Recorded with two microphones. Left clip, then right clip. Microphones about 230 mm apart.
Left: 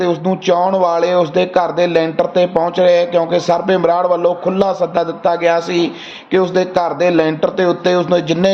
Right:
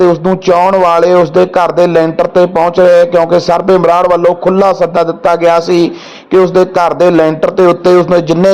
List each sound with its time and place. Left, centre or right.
0.0 s speech: right